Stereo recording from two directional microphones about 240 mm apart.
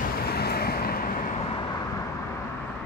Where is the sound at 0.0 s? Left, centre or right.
Left.